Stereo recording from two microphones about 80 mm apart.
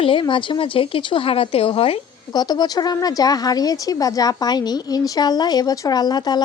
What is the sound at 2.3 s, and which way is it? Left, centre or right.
A woman's voice, left.